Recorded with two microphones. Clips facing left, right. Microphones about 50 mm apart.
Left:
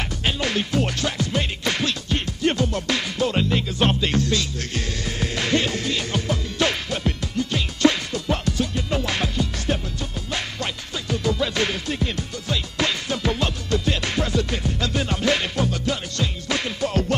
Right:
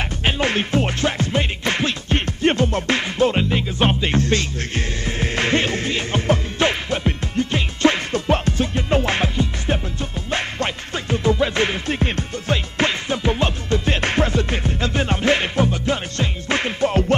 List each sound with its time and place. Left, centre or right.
0.2 s music: right
3.4 s music: centre